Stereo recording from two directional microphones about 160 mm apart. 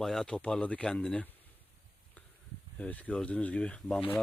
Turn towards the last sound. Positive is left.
turn(degrees=5)  # may be behind; listen again after turning